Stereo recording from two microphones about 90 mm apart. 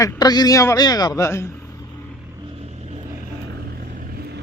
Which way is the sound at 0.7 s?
50° left (ahead or behind).